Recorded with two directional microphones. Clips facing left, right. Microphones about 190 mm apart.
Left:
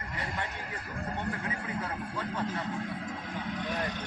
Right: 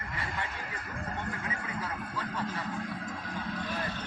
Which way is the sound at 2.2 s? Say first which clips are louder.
Left 2 dB; 25° left (ahead or behind).